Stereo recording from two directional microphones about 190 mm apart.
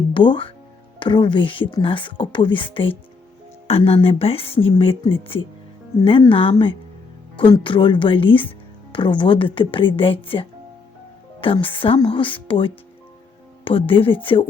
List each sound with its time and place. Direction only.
0.1 s a woman's voice: 25° left (ahead or behind)
11.3 s a woman's voice: 25° left (ahead or behind)